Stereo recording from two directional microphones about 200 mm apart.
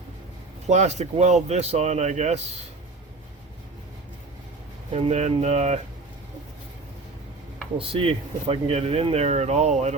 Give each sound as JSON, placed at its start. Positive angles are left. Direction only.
{"t": 0.7, "sound": "speech", "side_deg": -35}
{"t": 4.9, "sound": "speech", "side_deg": -30}
{"t": 7.8, "sound": "speech", "side_deg": -25}